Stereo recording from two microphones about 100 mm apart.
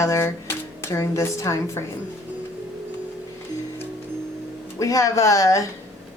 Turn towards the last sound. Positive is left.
turn(degrees=35)  # may be behind; listen again after turning